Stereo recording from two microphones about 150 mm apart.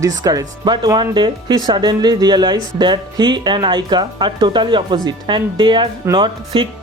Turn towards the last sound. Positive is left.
turn(degrees=-30)  # may be behind; listen again after turning